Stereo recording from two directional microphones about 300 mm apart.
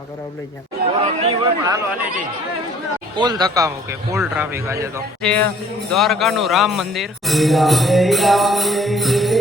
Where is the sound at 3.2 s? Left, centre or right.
Centre.